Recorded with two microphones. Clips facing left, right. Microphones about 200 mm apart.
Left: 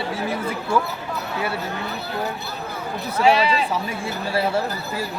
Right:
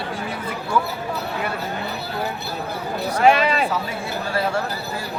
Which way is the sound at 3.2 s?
50° right (ahead or behind).